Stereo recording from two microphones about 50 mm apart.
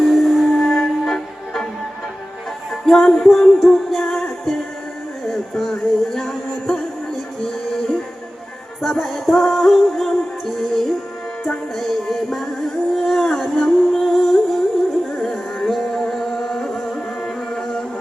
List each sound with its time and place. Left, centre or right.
0.0 s music: centre
2.8 s music: centre
8.8 s music: centre